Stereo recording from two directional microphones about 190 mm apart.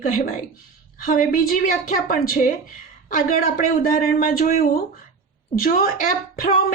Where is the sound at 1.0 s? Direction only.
45° left (ahead or behind).